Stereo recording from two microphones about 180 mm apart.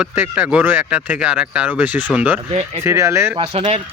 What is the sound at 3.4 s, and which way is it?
Speech, 35° right (ahead or behind).